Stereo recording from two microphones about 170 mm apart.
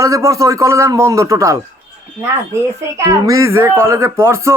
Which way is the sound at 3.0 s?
20° right (ahead or behind).